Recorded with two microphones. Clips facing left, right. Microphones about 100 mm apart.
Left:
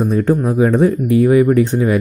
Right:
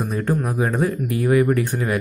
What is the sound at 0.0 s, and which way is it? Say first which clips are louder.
Speech: left 8 dB; 25° left (ahead or behind).